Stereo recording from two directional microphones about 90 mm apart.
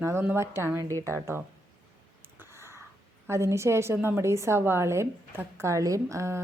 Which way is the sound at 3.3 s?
30° right (ahead or behind).